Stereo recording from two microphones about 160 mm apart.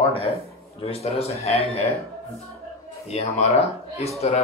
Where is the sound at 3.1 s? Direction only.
40° left (ahead or behind).